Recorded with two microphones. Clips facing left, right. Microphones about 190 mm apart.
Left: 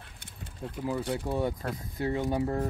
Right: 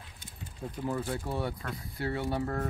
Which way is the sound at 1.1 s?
15° left (ahead or behind).